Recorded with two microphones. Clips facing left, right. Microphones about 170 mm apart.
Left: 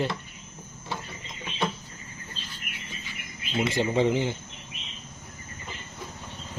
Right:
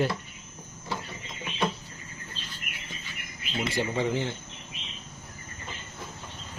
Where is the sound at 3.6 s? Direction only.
20° left (ahead or behind).